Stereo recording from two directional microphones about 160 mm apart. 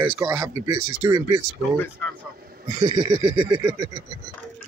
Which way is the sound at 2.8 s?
30° right (ahead or behind).